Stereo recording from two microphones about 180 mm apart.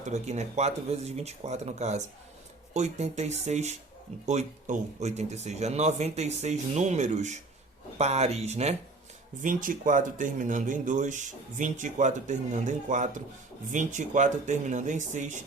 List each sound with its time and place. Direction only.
0.0 s speech: 40° right (ahead or behind)
9.4 s speech: 45° right (ahead or behind)